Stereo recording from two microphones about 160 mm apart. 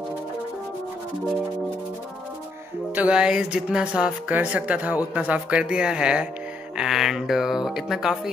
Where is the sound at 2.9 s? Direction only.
5° right (ahead or behind).